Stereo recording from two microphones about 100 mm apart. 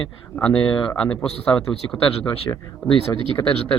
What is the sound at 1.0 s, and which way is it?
Speech, 10° left (ahead or behind).